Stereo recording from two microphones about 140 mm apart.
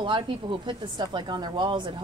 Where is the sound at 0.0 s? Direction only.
35° right (ahead or behind).